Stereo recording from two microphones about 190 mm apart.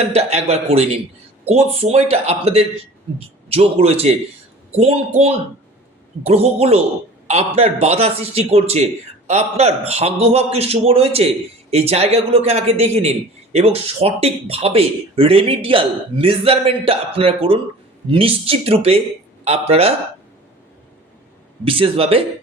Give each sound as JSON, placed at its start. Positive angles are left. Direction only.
{"t": 0.1, "sound": "a man's voice", "side_deg": -35}
{"t": 21.6, "sound": "speech", "side_deg": -30}